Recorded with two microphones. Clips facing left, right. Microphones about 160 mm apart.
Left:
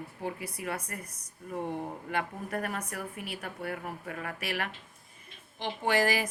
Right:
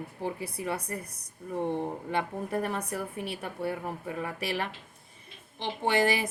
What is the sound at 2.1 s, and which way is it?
A woman's voice, 25° right (ahead or behind).